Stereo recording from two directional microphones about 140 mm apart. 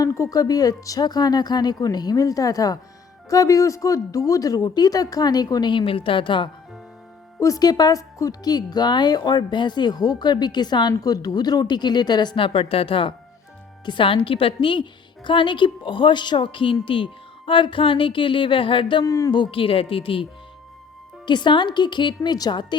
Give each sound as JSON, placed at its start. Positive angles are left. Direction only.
{"t": 0.0, "sound": "a woman's voice", "side_deg": 25}
{"t": 7.3, "sound": "a woman's voice", "side_deg": 25}
{"t": 19.0, "sound": "a woman's voice", "side_deg": 25}
{"t": 21.2, "sound": "a woman's voice", "side_deg": 35}